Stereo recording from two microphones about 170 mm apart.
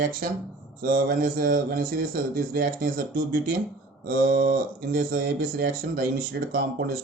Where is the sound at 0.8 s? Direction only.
60° right (ahead or behind).